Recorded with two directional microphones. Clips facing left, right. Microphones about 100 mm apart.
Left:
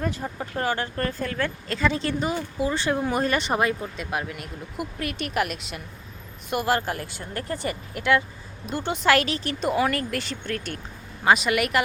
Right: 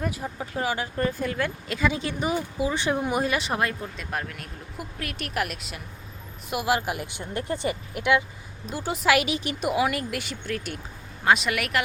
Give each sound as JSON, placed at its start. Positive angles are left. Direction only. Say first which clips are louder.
{"t": 0.0, "sound": "speech", "louder": "left 1 dB", "side_deg": -5}
{"t": 8.6, "sound": "speech", "louder": "left 1 dB", "side_deg": -5}